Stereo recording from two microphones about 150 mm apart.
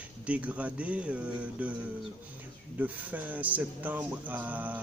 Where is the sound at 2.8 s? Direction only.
10° right (ahead or behind).